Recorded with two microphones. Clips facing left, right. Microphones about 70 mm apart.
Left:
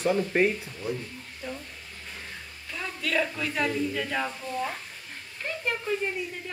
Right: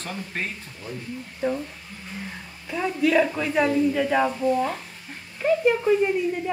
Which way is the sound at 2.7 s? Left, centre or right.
Centre.